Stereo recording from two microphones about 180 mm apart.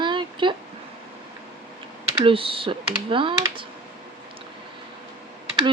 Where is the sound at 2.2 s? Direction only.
30° right (ahead or behind).